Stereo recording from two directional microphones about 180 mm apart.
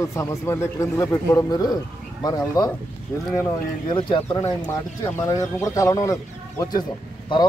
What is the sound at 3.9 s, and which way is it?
Speech, 25° left (ahead or behind).